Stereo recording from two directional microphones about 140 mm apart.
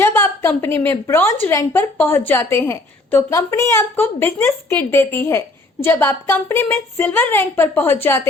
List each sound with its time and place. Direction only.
0.0 s a woman's voice: 15° left (ahead or behind)